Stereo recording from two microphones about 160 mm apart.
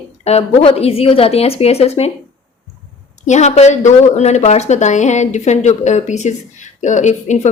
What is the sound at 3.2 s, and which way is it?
Speech, 45° left (ahead or behind).